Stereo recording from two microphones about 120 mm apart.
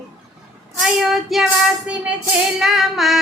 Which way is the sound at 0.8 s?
Centre (ahead or behind).